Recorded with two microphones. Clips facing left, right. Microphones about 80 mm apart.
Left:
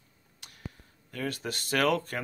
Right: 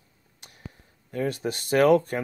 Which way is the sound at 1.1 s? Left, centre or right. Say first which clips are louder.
Right 7 dB; right.